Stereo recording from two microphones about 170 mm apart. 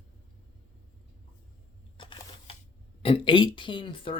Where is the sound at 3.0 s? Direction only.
30° left (ahead or behind).